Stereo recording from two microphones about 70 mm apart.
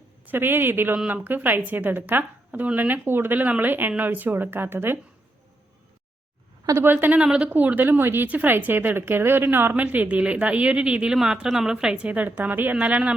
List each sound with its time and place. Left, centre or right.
0.3 s speech: right
6.7 s speech: right
7.3 s speech: centre
7.5 s speech: right